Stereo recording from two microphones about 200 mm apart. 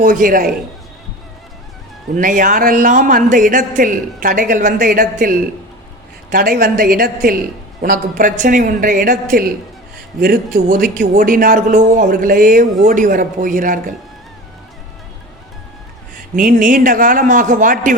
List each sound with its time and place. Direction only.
0.0 s a man's voice: 45° right (ahead or behind)
2.1 s a man's voice: 40° right (ahead or behind)
16.3 s a man's voice: 45° right (ahead or behind)